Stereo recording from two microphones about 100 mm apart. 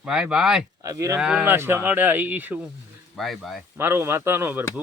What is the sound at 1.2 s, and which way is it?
Speech, 10° right (ahead or behind).